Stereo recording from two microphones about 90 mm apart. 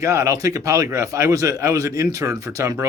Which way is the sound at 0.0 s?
35° right (ahead or behind).